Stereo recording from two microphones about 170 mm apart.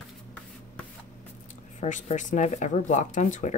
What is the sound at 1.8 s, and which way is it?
Speech, 45° left (ahead or behind).